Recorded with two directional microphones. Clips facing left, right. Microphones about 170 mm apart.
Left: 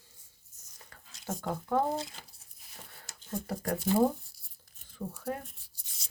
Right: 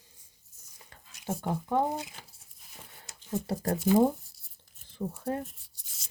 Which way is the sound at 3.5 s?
30° right (ahead or behind).